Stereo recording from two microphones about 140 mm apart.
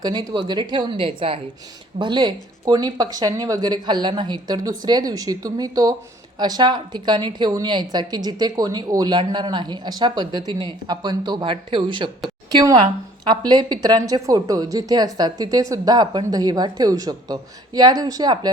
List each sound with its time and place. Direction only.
0.0 s a woman's voice: 30° right (ahead or behind)